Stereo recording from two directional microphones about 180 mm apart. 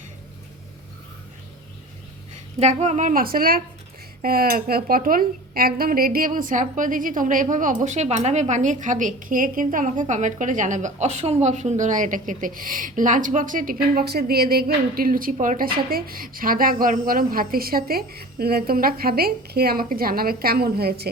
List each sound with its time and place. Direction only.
2.6 s a woman's voice: 40° right (ahead or behind); by 21.1 s 60° right (ahead or behind)